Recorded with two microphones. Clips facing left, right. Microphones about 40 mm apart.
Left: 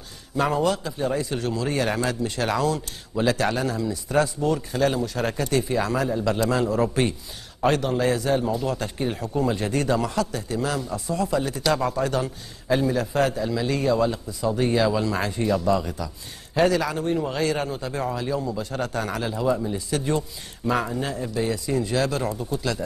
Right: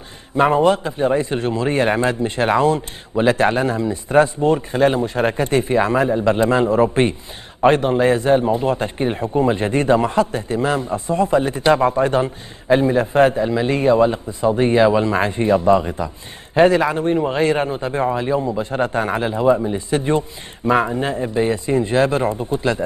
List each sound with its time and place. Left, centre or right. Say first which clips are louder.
0.4 s a man's voice: right 8 dB; right